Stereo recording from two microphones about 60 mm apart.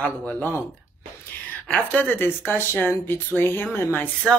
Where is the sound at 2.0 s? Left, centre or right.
Left.